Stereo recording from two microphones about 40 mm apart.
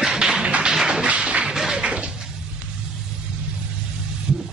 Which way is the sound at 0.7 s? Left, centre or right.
Centre.